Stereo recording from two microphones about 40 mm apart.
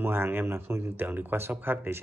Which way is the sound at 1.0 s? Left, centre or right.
Right.